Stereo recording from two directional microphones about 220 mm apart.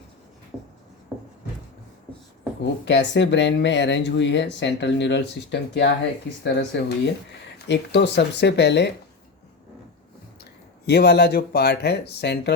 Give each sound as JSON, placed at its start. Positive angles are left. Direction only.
{"t": 1.1, "sound": "a sound", "side_deg": -5}
{"t": 2.8, "sound": "speech", "side_deg": 50}
{"t": 10.8, "sound": "speech", "side_deg": 45}